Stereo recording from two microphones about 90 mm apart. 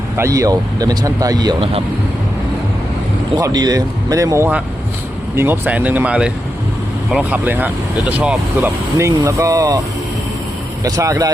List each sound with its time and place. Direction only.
0.2 s speech: 35° right (ahead or behind)
3.3 s speech: 45° right (ahead or behind)
5.4 s speech: 20° right (ahead or behind)
9.0 s speech: 35° right (ahead or behind)
10.8 s speech: 40° right (ahead or behind)